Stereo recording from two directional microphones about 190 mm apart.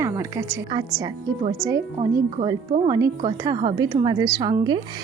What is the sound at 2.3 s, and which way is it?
A woman's voice, 30° right (ahead or behind).